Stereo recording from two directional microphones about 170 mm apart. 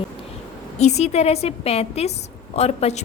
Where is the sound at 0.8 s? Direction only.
40° left (ahead or behind).